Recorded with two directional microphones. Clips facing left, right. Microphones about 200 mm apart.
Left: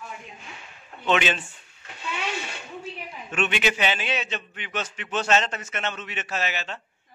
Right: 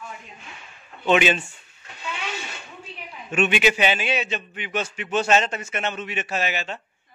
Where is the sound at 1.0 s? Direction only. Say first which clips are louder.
Right 4 dB; 10° right (ahead or behind).